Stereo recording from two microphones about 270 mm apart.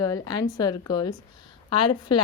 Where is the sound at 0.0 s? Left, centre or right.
Centre.